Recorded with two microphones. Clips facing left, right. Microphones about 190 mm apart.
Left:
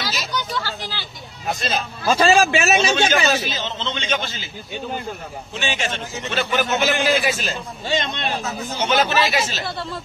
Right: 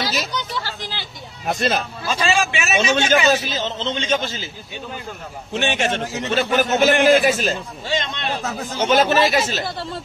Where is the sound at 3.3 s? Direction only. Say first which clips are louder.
Right 3 dB; 40° right (ahead or behind).